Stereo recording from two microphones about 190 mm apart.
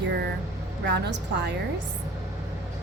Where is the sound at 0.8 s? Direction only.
65° right (ahead or behind).